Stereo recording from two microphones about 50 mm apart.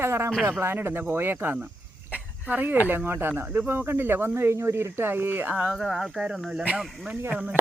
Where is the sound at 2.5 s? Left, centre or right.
Right.